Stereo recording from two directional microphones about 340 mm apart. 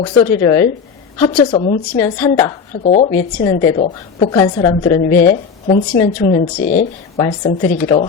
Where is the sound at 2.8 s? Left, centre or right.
Centre.